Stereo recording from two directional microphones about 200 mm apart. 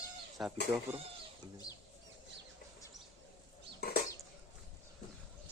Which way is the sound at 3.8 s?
50° left (ahead or behind).